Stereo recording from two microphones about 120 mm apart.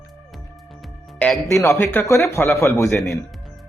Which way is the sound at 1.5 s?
25° left (ahead or behind).